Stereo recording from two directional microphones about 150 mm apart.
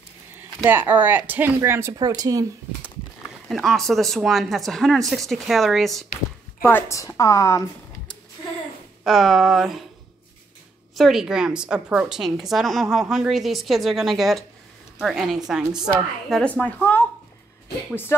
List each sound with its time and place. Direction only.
0.7 s speech: 15° right (ahead or behind)
3.4 s a woman's voice: centre (ahead or behind)
6.6 s a woman's voice: 20° left (ahead or behind)
9.0 s a woman's voice: centre (ahead or behind)
11.0 s a woman's voice: centre (ahead or behind)